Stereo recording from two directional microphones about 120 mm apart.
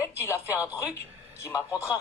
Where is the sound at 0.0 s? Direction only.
25° left (ahead or behind).